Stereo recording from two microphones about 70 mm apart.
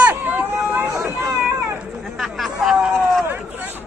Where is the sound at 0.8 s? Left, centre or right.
Right.